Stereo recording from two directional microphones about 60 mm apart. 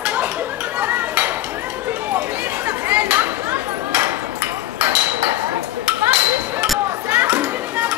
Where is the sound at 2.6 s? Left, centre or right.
Right.